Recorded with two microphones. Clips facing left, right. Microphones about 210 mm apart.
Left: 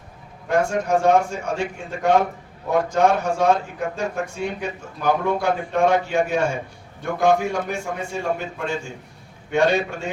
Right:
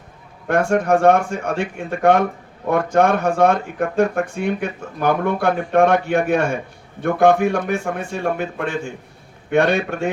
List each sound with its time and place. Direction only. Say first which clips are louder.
0.4 s speech: right 4 dB; 60° right (ahead or behind)